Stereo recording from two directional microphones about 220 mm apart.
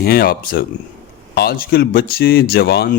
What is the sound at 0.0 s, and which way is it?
Speech, 45° left (ahead or behind).